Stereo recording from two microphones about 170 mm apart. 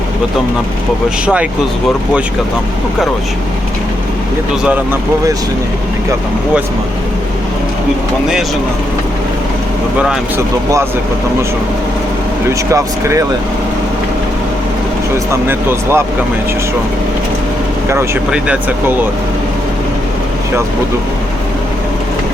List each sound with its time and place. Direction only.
4.6 s speech: 10° right (ahead or behind)
10.0 s speech: 5° right (ahead or behind)
12.5 s speech: 15° right (ahead or behind)
15.3 s speech: 15° right (ahead or behind)
17.8 s speech: 15° right (ahead or behind)